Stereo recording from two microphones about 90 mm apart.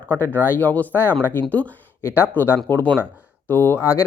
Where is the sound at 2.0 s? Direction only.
30° left (ahead or behind).